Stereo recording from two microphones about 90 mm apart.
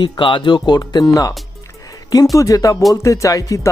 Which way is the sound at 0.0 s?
65° left (ahead or behind).